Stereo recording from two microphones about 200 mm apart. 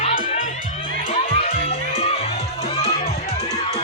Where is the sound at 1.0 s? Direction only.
25° left (ahead or behind).